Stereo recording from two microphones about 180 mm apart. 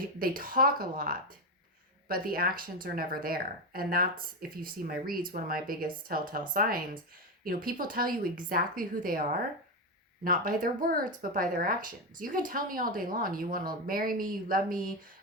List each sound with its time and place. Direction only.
0.2 s speech: 55° right (ahead or behind)